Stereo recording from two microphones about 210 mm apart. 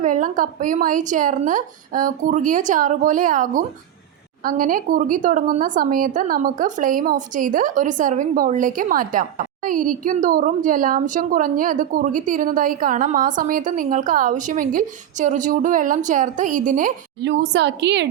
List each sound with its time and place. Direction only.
0.0 s a woman's voice: 40° right (ahead or behind)
17.2 s a woman's voice: 55° right (ahead or behind)